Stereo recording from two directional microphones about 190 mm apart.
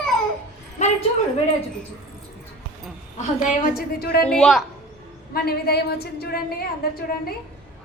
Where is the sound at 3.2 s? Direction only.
50° left (ahead or behind).